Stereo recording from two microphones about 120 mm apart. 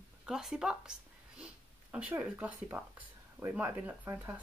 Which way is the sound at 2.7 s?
15° right (ahead or behind).